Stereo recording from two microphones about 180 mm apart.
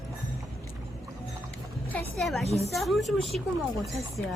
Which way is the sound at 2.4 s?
35° left (ahead or behind).